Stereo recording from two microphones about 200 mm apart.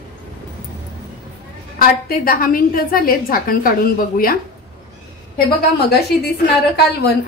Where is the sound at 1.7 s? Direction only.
45° left (ahead or behind).